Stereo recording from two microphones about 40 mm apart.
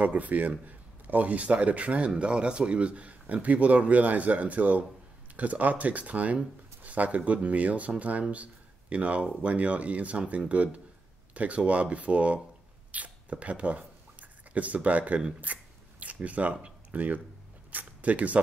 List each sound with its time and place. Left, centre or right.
0.0 s speech: right
12.9 s a sound: right
15.4 s scissors: right
17.6 s mechanisms: right